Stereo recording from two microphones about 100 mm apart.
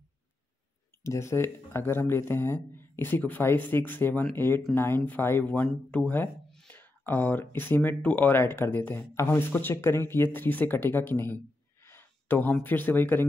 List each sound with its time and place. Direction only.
1.0 s speech: 30° left (ahead or behind)
11.8 s a sound: 20° left (ahead or behind)
12.6 s speech: 20° left (ahead or behind)